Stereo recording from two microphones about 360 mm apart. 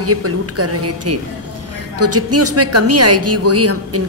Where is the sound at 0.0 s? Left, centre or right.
Right.